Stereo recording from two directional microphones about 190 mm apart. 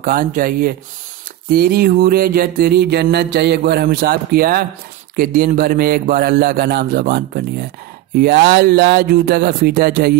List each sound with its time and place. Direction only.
0.0 s mantra: 50° right (ahead or behind)
8.2 s speech: 55° right (ahead or behind)